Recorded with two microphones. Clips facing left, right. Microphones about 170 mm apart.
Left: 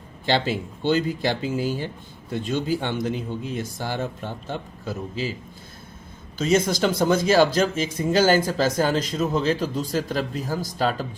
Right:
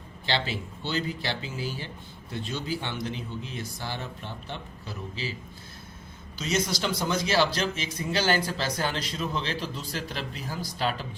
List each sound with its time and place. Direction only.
0.3 s speech: 45° left (ahead or behind)
6.4 s speech: 50° left (ahead or behind)